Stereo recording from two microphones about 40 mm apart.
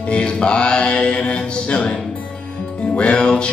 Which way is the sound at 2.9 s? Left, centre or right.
Left.